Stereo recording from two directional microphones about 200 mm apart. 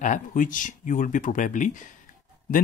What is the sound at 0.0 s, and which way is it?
Speech, 40° left (ahead or behind).